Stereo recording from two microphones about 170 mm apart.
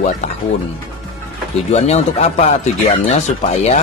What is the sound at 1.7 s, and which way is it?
Speech, 40° left (ahead or behind).